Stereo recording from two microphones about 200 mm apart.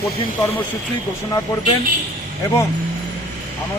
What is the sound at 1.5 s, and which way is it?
Speech, 20° left (ahead or behind).